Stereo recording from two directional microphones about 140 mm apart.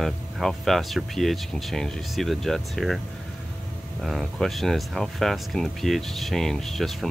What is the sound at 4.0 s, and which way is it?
Speech, centre (ahead or behind).